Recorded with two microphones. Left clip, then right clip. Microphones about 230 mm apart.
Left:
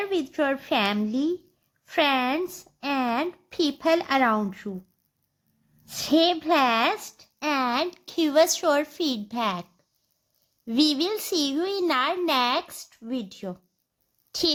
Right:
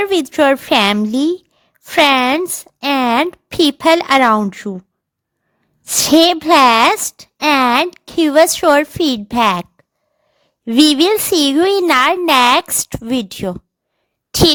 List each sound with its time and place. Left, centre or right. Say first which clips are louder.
0.0 s a child's voice: right 13 dB; right
5.8 s a child's voice: right 11 dB; right